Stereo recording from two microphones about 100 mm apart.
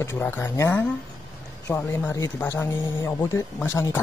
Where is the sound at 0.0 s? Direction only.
20° left (ahead or behind).